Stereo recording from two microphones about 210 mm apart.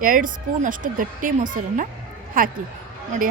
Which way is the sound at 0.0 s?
40° right (ahead or behind).